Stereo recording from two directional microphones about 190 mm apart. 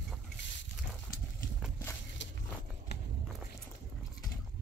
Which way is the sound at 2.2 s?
75° left (ahead or behind).